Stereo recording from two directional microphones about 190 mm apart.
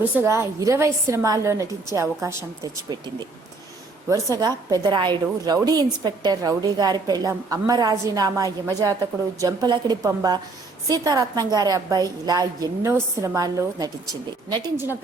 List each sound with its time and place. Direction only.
0.2 s a woman's voice: 15° right (ahead or behind)
4.1 s a woman's voice: 20° right (ahead or behind)